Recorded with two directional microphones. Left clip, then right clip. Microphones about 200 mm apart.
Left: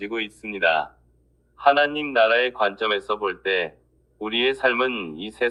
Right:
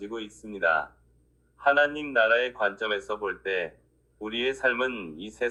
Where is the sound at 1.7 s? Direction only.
55° left (ahead or behind).